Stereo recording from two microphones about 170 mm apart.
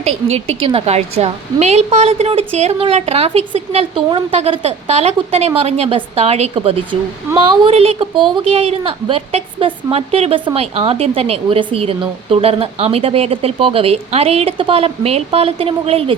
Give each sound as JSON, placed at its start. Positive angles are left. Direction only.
{"t": 0.0, "sound": "a woman's voice", "side_deg": -35}